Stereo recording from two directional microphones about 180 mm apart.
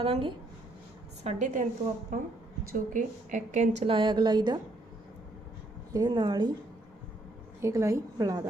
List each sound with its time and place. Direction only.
0.0 s a woman's voice: 30° right (ahead or behind)
3.8 s a woman's voice: 30° right (ahead or behind)
5.9 s a woman's voice: 20° right (ahead or behind)
7.6 s a woman's voice: 15° right (ahead or behind)